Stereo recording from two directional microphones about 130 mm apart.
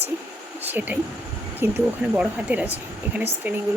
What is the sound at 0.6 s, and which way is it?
Speech, 15° right (ahead or behind).